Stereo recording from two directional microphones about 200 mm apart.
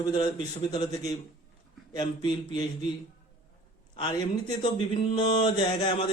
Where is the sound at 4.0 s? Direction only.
20° left (ahead or behind).